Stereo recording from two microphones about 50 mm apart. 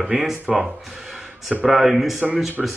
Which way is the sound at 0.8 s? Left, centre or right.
Centre.